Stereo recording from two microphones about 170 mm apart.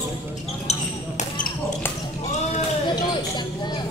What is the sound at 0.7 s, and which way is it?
Basketball bounce, 40° left (ahead or behind).